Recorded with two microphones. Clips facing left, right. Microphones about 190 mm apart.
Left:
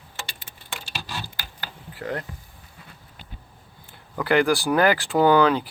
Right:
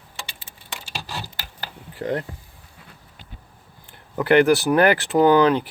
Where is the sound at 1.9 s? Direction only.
30° right (ahead or behind).